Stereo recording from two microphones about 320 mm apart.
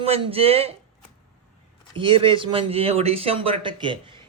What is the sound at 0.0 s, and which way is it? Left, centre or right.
Speech, centre.